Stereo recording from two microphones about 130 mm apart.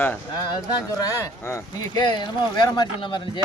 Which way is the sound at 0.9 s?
25° left (ahead or behind).